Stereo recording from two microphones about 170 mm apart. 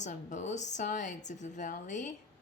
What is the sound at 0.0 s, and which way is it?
A woman's voice, 45° left (ahead or behind).